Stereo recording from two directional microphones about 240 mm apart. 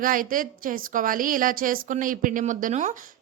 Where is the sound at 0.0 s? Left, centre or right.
Right.